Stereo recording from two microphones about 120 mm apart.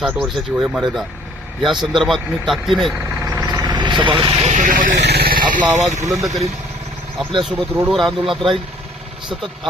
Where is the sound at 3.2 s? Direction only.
25° right (ahead or behind).